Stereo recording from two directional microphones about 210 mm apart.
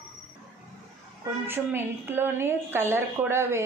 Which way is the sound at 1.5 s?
10° right (ahead or behind).